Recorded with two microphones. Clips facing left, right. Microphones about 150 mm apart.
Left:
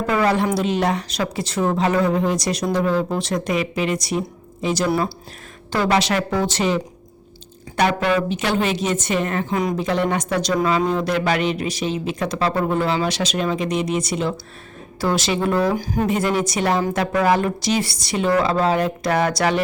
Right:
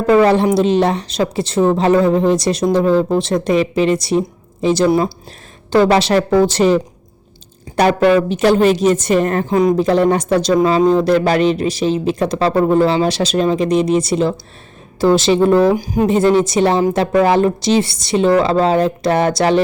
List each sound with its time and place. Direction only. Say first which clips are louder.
0.1 s a woman's voice: right 8 dB; 30° right (ahead or behind)
5.7 s a woman's voice: right 7 dB; 30° right (ahead or behind)
15.7 s speech: right 6 dB; 15° right (ahead or behind)
16.0 s a woman's voice: right 10 dB; 30° right (ahead or behind)